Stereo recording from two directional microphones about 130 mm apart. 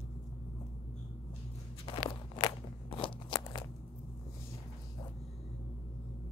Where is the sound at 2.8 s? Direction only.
40° left (ahead or behind).